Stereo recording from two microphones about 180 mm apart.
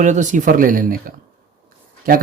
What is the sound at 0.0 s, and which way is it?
Speech, 45° right (ahead or behind).